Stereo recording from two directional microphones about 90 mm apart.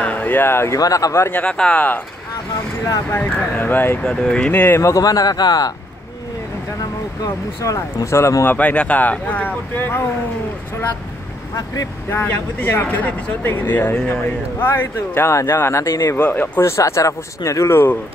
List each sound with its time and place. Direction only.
0.0 s a sound: 15° left (ahead or behind)
0.7 s speech: 40° left (ahead or behind)
1.3 s speech: 10° left (ahead or behind)
2.5 s speech: 40° left (ahead or behind)
3.1 s speech: 20° left (ahead or behind)
4.0 s speech: 10° left (ahead or behind)
4.8 s a man's voice: 40° left (ahead or behind)
6.8 s speech: 40° left (ahead or behind)
8.5 s speech: 15° left (ahead or behind)
11.5 s speech: 40° left (ahead or behind)
12.1 s speech: 25° left (ahead or behind)
16.2 s speech: 20° left (ahead or behind)